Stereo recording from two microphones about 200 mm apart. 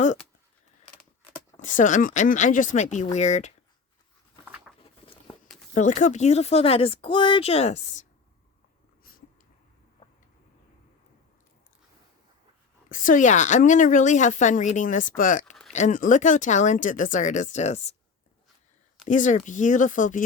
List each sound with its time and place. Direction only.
1.5 s a woman's voice: 40° left (ahead or behind)
4.8 s patter: 25° left (ahead or behind)
5.7 s a woman's voice: 40° left (ahead or behind)
9.1 s a sound: 45° left (ahead or behind)
12.9 s a woman's voice: 40° left (ahead or behind)
19.0 s a woman's voice: 40° left (ahead or behind)